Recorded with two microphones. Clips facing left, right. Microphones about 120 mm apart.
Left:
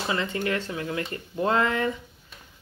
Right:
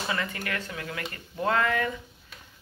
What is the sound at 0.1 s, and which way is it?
Speech, 25° left (ahead or behind).